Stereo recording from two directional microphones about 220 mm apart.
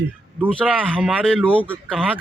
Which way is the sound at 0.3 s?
5° right (ahead or behind).